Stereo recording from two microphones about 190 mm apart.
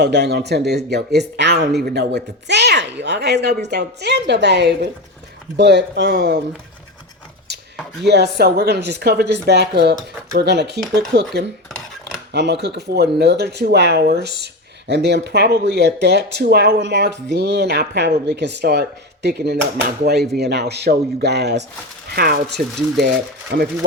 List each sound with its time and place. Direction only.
0.0 s speech: 60° right (ahead or behind)
8.0 s speech: 60° right (ahead or behind)
12.3 s speech: 60° right (ahead or behind)